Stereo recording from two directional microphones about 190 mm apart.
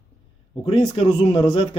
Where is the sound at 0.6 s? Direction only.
30° left (ahead or behind).